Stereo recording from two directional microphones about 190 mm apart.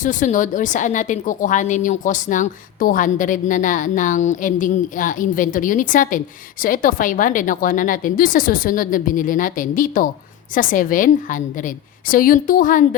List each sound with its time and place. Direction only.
0.0 s a woman's voice: 40° left (ahead or behind)